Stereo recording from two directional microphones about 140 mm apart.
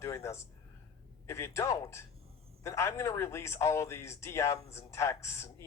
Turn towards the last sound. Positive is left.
turn(degrees=20)  # may be behind; listen again after turning